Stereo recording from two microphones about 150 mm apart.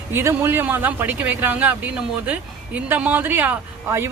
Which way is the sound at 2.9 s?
10° right (ahead or behind).